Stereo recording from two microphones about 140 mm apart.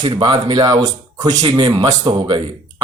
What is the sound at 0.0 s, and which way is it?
A man's voice, 35° right (ahead or behind).